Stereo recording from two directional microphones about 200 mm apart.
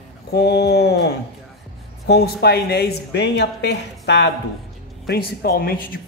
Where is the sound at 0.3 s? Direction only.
55° left (ahead or behind).